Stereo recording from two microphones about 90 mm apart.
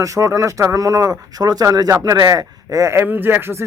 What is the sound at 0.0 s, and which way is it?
Speech, 35° right (ahead or behind).